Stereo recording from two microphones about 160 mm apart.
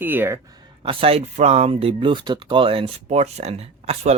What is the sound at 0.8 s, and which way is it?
Speech, 35° right (ahead or behind).